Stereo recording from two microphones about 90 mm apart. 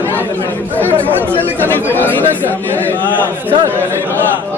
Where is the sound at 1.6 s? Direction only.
20° left (ahead or behind).